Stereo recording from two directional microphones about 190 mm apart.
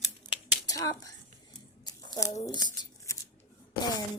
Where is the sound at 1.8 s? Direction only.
20° left (ahead or behind).